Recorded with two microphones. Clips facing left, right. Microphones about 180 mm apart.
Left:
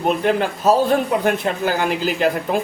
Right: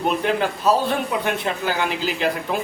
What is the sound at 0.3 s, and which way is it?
Speech, 45° left (ahead or behind).